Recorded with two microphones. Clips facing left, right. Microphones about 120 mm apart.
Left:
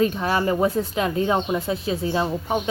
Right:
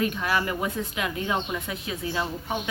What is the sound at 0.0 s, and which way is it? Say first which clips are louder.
Speech: left 5 dB; 30° left (ahead or behind).